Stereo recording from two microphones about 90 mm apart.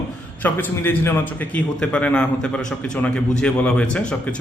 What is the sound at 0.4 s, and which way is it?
Speech, 25° left (ahead or behind).